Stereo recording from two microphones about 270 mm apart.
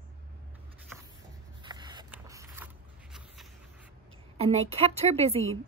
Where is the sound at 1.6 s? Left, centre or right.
Centre.